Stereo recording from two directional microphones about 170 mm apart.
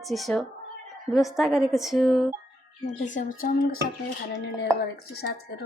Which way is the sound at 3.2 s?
50° left (ahead or behind).